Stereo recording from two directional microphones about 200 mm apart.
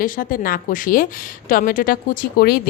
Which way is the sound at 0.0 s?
45° left (ahead or behind).